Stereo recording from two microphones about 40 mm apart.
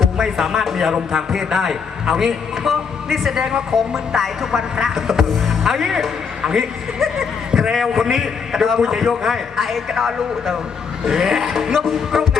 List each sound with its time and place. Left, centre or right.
0.0 s speech: centre